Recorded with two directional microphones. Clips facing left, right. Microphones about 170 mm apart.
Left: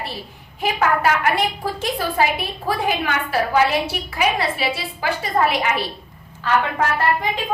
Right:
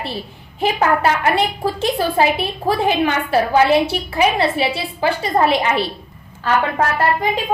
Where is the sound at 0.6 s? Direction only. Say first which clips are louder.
Right 3 dB; 30° right (ahead or behind).